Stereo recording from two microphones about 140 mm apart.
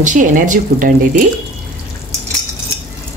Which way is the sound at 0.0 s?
65° right (ahead or behind).